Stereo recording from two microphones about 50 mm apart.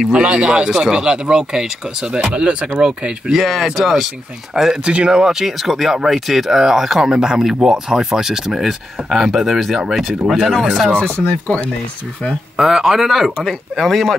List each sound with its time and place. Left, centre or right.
0.1 s speech: right
3.3 s speech: centre
4.8 s speech: centre
11.0 s speech: left
12.5 s speech: centre
13.4 s speech: centre